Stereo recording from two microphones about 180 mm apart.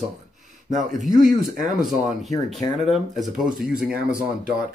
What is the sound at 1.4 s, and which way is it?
Speech, 50° right (ahead or behind).